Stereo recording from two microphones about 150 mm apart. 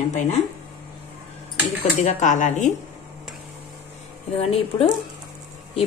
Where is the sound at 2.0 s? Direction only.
55° left (ahead or behind).